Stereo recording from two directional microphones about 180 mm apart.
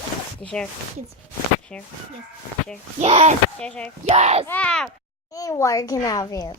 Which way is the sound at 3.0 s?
35° right (ahead or behind).